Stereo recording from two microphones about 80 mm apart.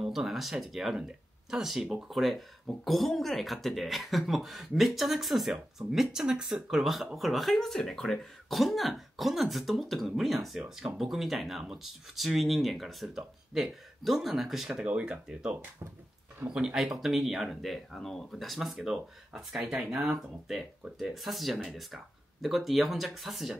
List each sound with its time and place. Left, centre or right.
0.0 s speech: centre
14.9 s speech: centre